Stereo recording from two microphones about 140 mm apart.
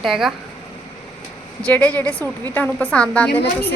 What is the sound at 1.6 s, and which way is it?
A woman's voice, 10° left (ahead or behind).